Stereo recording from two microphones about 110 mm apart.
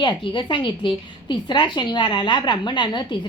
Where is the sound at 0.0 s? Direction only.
45° left (ahead or behind).